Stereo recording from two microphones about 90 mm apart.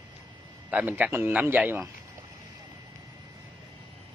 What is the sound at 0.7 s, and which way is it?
A man's voice, 20° right (ahead or behind).